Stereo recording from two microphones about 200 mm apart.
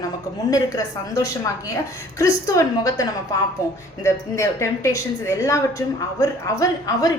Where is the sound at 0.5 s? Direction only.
15° left (ahead or behind).